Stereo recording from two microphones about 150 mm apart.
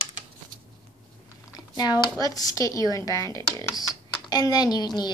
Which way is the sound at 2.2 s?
25° left (ahead or behind).